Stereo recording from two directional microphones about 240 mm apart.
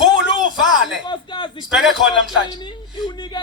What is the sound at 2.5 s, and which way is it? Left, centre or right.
Speech, centre.